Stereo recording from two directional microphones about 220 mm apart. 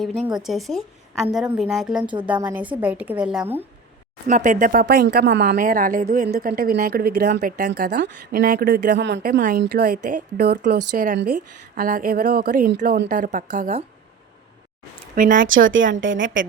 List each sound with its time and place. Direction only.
0.3 s a woman's voice: centre (ahead or behind)
4.3 s speech: 35° right (ahead or behind)
7.7 s speech: 50° right (ahead or behind)
8.1 s speech: 35° right (ahead or behind)
9.4 s speech: 40° right (ahead or behind)
15.1 s speech: 40° right (ahead or behind)
15.4 s a woman's voice: 65° right (ahead or behind)